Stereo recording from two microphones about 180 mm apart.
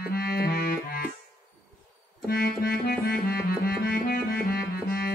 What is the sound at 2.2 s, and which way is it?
Music, 60° left (ahead or behind).